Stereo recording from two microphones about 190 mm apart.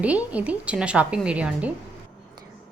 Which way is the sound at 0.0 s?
5° right (ahead or behind).